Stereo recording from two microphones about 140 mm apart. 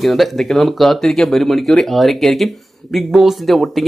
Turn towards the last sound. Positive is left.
turn(degrees=0)  # may be behind; listen again after turning